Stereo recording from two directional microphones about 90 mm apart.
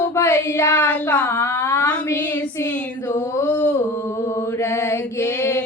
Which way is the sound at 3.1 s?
20° left (ahead or behind).